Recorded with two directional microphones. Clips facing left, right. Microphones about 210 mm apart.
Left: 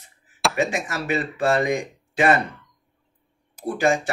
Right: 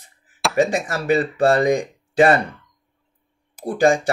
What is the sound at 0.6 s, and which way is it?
Speech, 35° right (ahead or behind).